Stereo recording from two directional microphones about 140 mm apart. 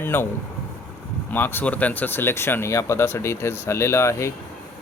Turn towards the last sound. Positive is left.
turn(degrees=20)  # may be behind; listen again after turning